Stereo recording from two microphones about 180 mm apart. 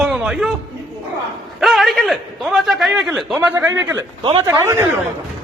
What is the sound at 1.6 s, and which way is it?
A man's voice, centre (ahead or behind).